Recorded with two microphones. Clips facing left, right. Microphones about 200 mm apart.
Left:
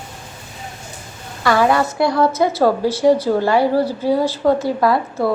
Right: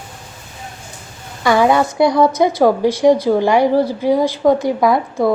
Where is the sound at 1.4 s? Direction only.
20° right (ahead or behind).